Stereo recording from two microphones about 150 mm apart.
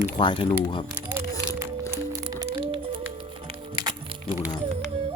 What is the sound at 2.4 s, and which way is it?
Music, 40° right (ahead or behind).